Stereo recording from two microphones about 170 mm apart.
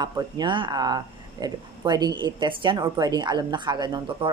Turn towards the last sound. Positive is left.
turn(degrees=-30)  # may be behind; listen again after turning